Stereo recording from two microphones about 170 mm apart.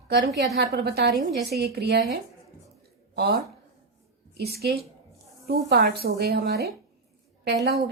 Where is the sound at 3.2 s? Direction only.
65° right (ahead or behind).